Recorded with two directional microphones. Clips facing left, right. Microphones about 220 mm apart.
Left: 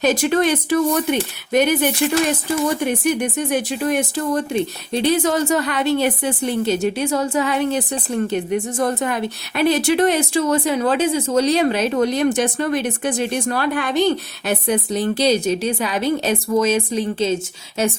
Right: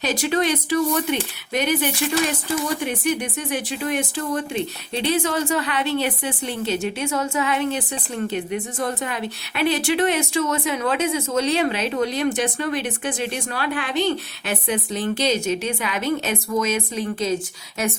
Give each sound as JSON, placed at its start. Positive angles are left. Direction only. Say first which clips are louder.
{"t": 0.0, "sound": "a woman's voice", "louder": "left 5 dB", "side_deg": 50}